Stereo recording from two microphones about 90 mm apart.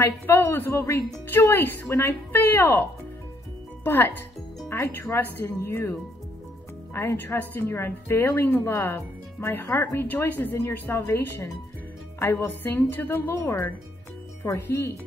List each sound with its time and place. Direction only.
0.0 s a woman's voice: 25° left (ahead or behind)
3.8 s a woman's voice: 25° left (ahead or behind)